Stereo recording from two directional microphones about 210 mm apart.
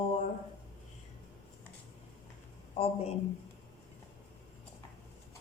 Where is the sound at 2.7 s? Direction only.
25° left (ahead or behind).